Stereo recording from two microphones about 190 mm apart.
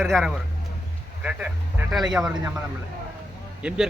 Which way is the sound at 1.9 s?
5° right (ahead or behind).